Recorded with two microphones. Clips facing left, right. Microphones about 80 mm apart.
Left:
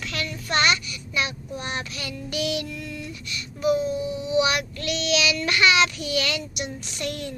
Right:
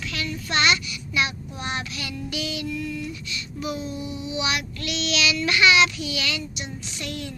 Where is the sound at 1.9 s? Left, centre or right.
Left.